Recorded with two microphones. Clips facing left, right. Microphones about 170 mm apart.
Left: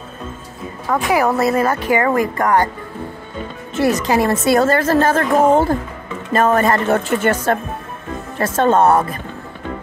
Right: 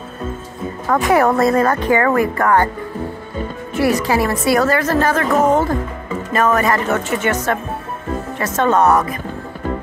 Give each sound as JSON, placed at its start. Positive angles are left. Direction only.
{"t": 0.8, "sound": "a woman's voice", "side_deg": 0}
{"t": 3.7, "sound": "a woman's voice", "side_deg": 20}